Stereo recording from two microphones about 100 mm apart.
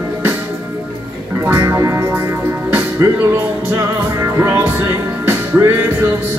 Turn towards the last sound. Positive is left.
turn(degrees=-25)  # may be behind; listen again after turning